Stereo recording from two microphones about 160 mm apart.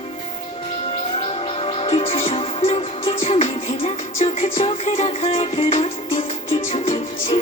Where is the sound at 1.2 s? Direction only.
35° left (ahead or behind).